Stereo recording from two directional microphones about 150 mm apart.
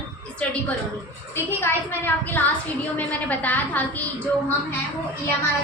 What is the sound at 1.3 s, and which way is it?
A woman's voice, 15° left (ahead or behind).